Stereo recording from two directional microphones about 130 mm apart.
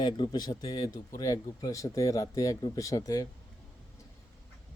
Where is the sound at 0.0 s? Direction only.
35° left (ahead or behind).